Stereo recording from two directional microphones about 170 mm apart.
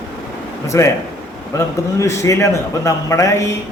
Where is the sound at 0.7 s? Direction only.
15° left (ahead or behind).